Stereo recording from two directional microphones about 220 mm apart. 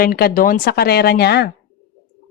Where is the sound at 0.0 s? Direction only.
40° left (ahead or behind).